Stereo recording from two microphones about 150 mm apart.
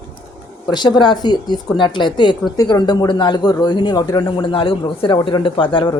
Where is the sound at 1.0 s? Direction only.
30° left (ahead or behind).